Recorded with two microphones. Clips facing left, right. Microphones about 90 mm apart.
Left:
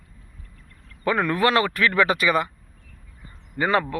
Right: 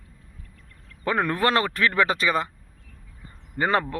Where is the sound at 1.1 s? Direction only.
35° right (ahead or behind).